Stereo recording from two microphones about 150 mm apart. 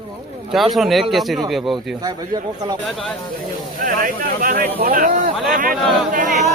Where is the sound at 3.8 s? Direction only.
70° right (ahead or behind).